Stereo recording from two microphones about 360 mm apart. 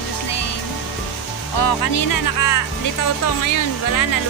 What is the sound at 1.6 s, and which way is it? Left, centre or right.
Speech, left.